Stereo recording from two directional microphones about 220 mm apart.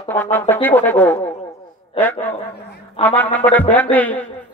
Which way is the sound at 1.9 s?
10° left (ahead or behind).